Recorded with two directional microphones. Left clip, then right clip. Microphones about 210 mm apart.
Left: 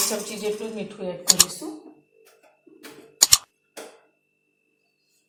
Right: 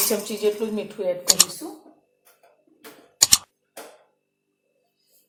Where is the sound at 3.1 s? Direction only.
Centre (ahead or behind).